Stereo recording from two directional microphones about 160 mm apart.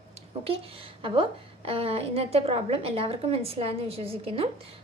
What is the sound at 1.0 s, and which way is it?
A woman's voice, 35° right (ahead or behind).